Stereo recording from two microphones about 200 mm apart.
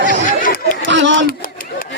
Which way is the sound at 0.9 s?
65° right (ahead or behind).